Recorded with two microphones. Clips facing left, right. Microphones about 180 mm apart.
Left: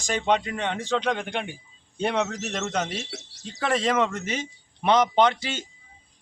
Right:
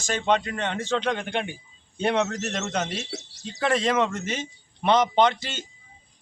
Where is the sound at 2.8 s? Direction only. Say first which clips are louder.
Right 1 dB; 55° left (ahead or behind).